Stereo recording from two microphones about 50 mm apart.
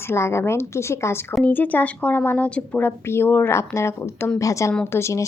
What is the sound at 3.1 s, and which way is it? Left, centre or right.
Speech, left.